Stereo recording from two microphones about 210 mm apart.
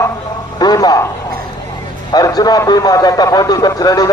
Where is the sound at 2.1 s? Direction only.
20° left (ahead or behind).